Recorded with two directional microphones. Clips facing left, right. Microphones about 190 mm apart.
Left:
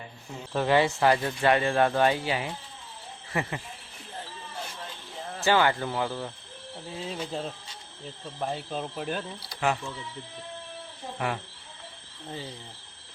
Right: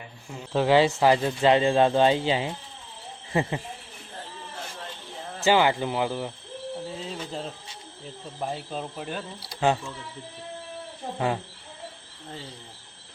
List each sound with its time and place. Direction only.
0.5 s speech: 15° right (ahead or behind)
5.4 s speech: 15° right (ahead or behind)
7.1 s speech: 5° left (ahead or behind)
9.6 s speech: 25° right (ahead or behind)